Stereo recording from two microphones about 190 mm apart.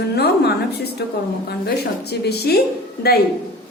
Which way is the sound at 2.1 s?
55° left (ahead or behind).